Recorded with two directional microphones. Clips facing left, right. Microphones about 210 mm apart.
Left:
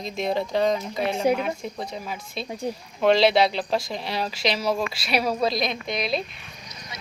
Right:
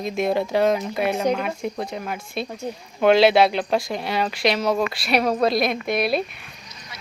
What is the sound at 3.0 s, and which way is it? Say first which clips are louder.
Speech: right 3 dB; centre (ahead or behind).